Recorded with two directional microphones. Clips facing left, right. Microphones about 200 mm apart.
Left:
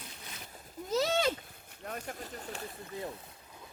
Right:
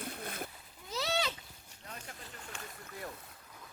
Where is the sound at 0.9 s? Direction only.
45° left (ahead or behind).